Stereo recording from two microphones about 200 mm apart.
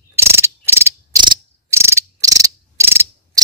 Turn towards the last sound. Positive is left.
turn(degrees=-10)  # may be behind; listen again after turning